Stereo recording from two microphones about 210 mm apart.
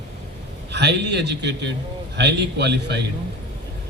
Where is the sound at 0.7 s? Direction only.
55° right (ahead or behind).